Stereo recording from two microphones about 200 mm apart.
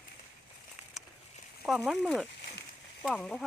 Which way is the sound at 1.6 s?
Centre (ahead or behind).